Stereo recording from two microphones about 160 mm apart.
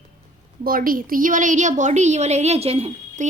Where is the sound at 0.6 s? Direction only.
65° right (ahead or behind).